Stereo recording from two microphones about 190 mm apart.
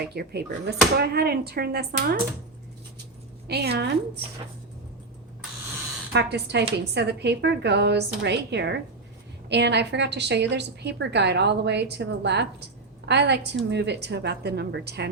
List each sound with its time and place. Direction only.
0.0 s a woman's voice: 55° right (ahead or behind)
3.4 s a woman's voice: 55° right (ahead or behind)
6.1 s a woman's voice: 60° right (ahead or behind)